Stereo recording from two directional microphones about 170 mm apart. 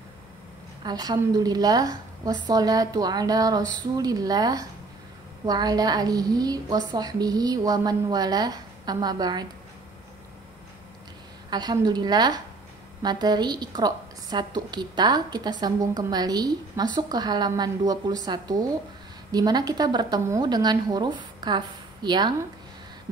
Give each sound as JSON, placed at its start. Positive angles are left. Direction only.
{"t": 0.8, "sound": "a woman's voice", "side_deg": -25}
{"t": 11.5, "sound": "a woman's voice", "side_deg": -25}